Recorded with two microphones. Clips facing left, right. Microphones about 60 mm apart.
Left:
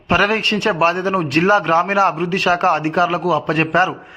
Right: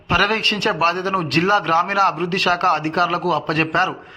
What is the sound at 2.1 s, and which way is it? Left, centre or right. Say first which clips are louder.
A man's voice: left 2 dB; centre.